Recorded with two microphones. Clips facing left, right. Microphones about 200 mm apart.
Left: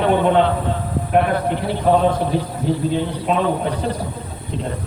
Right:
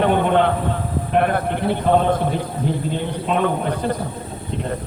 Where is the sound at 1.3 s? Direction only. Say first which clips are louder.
Even; 55° right (ahead or behind).